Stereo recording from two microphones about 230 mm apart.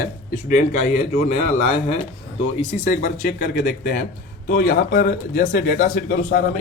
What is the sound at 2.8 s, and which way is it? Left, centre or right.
Speech, left.